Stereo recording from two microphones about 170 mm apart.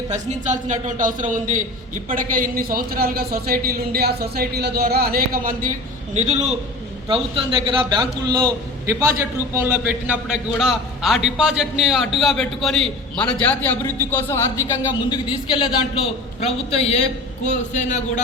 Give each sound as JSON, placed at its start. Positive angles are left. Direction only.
{"t": 0.1, "sound": "a man's voice", "side_deg": -45}
{"t": 6.1, "sound": "a man's voice", "side_deg": -40}
{"t": 7.6, "sound": "a man's voice", "side_deg": -30}
{"t": 15.1, "sound": "a man's voice", "side_deg": 30}